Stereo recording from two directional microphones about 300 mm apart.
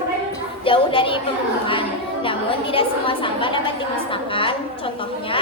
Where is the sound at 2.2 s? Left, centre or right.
Centre.